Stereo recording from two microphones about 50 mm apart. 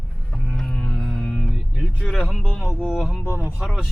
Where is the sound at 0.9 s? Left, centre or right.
Centre.